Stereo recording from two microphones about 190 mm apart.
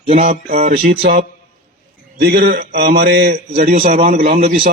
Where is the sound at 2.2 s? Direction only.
55° right (ahead or behind).